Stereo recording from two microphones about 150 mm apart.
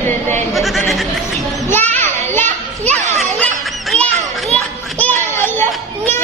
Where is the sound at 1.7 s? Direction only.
15° left (ahead or behind).